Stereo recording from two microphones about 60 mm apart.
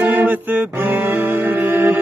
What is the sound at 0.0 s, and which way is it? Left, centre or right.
Music, right.